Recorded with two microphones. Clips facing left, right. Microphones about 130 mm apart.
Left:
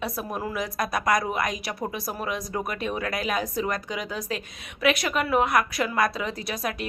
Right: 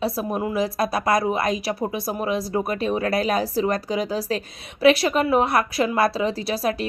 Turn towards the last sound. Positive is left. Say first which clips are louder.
# right 7 dB
turn(degrees=-30)  # may be behind; listen again after turning